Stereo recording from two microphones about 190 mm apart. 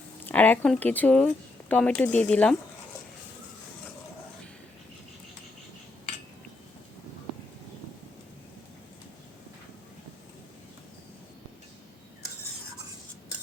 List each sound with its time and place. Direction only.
0.3 s speech: 10° left (ahead or behind)